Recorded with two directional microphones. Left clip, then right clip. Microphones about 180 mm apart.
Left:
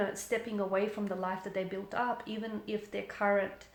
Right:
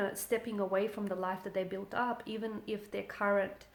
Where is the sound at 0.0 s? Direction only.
40° right (ahead or behind).